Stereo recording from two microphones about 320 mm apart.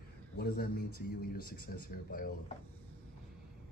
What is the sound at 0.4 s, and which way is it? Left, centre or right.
Speech, left.